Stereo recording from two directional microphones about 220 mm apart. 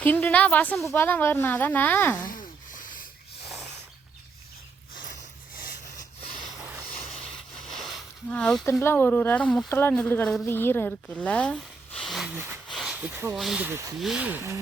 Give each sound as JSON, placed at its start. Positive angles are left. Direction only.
{"t": 0.0, "sound": "speech", "side_deg": 10}
{"t": 7.1, "sound": "speech", "side_deg": 0}